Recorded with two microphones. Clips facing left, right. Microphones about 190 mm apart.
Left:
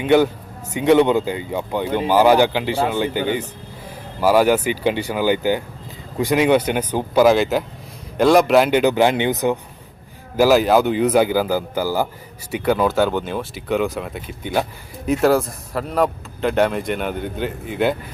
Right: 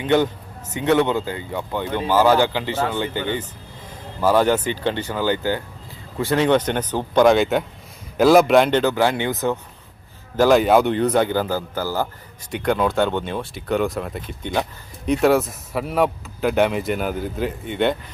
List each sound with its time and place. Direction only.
0.0 s speech: 10° left (ahead or behind)
8.8 s speech: 15° left (ahead or behind)
10.3 s speech: 5° left (ahead or behind)